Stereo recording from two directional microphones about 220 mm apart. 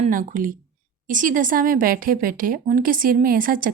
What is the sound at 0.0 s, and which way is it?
A woman's voice, 35° right (ahead or behind).